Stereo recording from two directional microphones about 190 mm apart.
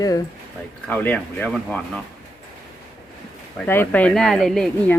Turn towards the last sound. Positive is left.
turn(degrees=0)  # may be behind; listen again after turning